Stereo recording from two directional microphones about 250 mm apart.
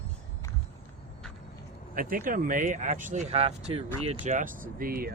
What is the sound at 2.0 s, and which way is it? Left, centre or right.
Speech, right.